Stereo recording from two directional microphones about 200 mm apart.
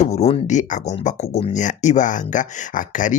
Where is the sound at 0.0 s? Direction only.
35° left (ahead or behind).